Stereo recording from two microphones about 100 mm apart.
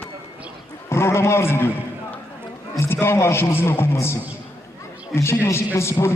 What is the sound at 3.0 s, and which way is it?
A man's voice, 25° left (ahead or behind).